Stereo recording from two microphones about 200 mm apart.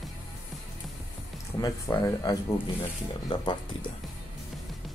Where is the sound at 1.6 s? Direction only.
15° left (ahead or behind).